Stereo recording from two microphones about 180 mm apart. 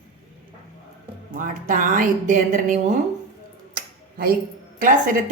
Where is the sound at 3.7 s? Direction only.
55° right (ahead or behind).